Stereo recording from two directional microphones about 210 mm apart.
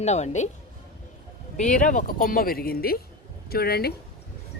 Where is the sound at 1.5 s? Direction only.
35° left (ahead or behind).